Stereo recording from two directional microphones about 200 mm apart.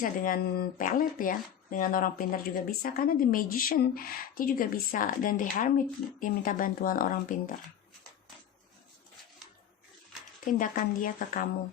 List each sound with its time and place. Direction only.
0.0 s speech: 45° left (ahead or behind)
10.4 s speech: 40° left (ahead or behind)